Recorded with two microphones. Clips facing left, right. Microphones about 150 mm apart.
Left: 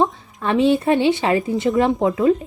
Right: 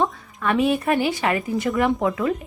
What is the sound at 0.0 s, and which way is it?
Speech, 25° left (ahead or behind).